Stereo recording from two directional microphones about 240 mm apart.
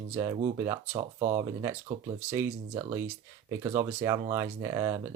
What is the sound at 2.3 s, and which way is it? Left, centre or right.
Speech, centre.